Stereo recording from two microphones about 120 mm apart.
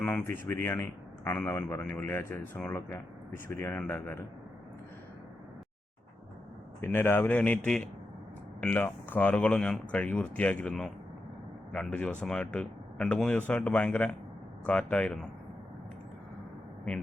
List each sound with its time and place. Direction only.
0.0 s a man's voice: 10° left (ahead or behind)
6.8 s a man's voice: 20° left (ahead or behind)